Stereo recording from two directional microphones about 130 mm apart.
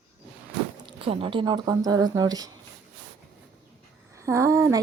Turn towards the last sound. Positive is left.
turn(degrees=-25)  # may be behind; listen again after turning